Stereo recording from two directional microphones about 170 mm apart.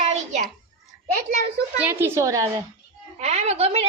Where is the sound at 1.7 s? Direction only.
10° right (ahead or behind).